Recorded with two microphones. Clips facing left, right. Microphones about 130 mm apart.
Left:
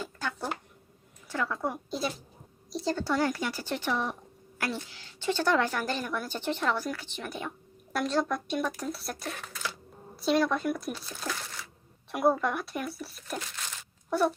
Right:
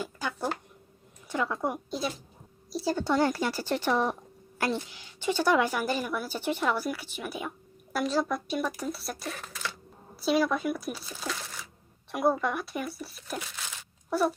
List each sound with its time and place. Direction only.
0.0 s a sound: 10° right (ahead or behind)
1.3 s a woman's voice: 20° right (ahead or behind)
1.9 s a woman's voice: centre (ahead or behind)
3.0 s speech: 25° right (ahead or behind)
4.5 s a woman's voice: 25° right (ahead or behind); by 14.3 s centre (ahead or behind)